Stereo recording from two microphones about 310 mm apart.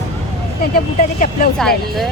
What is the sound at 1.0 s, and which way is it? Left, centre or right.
Speech, left.